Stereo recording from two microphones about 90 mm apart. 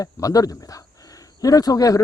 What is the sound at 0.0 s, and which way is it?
Speech, 40° left (ahead or behind).